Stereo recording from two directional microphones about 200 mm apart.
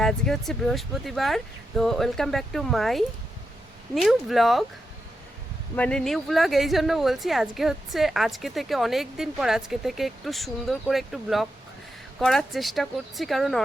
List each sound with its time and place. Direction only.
0.0 s speech: centre (ahead or behind)
5.7 s speech: 5° left (ahead or behind)